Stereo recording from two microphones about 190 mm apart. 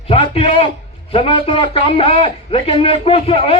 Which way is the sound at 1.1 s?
30° left (ahead or behind).